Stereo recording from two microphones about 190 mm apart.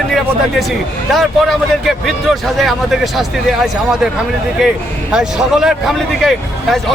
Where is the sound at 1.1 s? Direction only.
Centre (ahead or behind).